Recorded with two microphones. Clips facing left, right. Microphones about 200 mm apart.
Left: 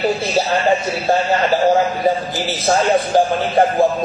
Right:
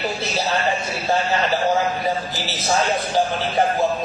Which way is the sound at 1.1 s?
50° left (ahead or behind).